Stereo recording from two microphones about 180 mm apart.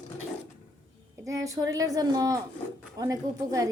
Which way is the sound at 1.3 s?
20° right (ahead or behind).